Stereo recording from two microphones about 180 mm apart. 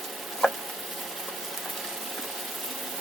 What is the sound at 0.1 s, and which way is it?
Frying, centre (ahead or behind).